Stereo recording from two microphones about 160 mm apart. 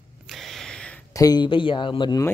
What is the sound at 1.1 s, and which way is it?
Speech, 25° left (ahead or behind).